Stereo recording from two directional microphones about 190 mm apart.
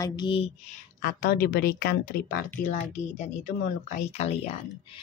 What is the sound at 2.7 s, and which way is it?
A woman's voice, 40° left (ahead or behind).